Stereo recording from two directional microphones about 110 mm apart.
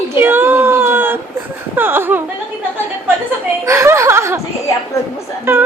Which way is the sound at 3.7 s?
25° right (ahead or behind).